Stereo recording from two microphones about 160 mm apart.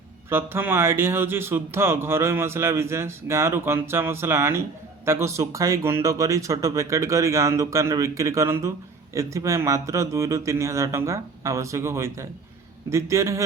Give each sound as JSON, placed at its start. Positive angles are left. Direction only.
{"t": 0.3, "sound": "speech", "side_deg": -15}